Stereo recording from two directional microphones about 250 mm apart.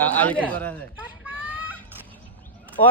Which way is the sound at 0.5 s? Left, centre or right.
Centre.